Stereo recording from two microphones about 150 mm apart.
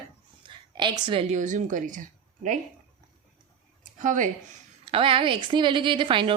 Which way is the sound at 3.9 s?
60° right (ahead or behind).